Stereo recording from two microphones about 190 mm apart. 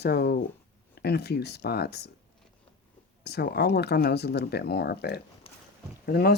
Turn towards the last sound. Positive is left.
turn(degrees=55)  # may be behind; listen again after turning